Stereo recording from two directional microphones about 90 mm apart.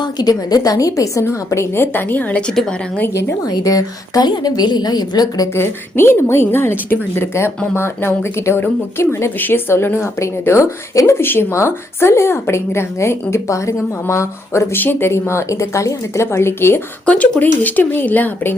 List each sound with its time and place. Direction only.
0.0 s a woman's voice: 45° left (ahead or behind); by 3.0 s 10° left (ahead or behind)
3.1 s speech: 30° left (ahead or behind)
3.5 s a woman's voice: 45° left (ahead or behind)
5.5 s a woman's voice: 25° left (ahead or behind)
17.1 s a woman's voice: 15° left (ahead or behind)